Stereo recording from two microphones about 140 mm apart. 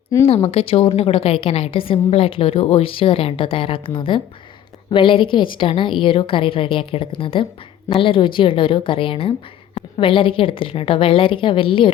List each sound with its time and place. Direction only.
0.3 s a woman's voice: 50° left (ahead or behind)